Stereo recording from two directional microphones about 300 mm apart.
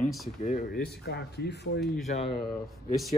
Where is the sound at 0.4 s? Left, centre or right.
Left.